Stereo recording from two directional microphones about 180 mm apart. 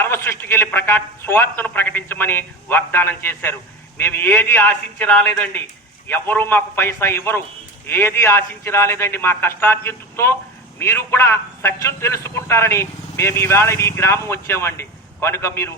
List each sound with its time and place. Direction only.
0.0 s a man's voice: 15° left (ahead or behind)